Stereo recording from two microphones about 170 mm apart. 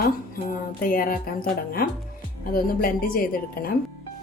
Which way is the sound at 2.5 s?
60° left (ahead or behind).